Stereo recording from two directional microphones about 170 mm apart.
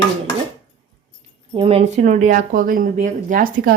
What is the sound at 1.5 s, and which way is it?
Speech, 35° right (ahead or behind).